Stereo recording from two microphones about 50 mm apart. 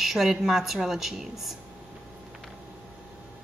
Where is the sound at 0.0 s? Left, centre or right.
Centre.